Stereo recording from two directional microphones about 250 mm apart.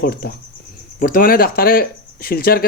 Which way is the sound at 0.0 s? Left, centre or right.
Left.